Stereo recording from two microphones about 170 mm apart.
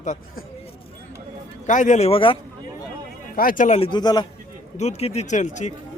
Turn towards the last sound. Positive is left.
turn(degrees=45)  # may be behind; listen again after turning